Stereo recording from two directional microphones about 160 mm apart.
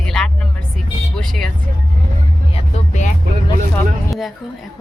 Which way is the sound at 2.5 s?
45° left (ahead or behind).